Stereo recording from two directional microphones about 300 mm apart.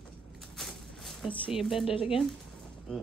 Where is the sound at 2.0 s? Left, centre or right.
Centre.